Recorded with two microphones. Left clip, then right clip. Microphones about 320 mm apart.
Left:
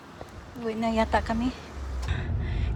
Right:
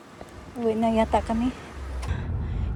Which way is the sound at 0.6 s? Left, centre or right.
Centre.